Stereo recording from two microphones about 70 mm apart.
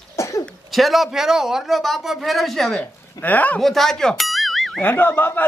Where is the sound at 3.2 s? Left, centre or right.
Left.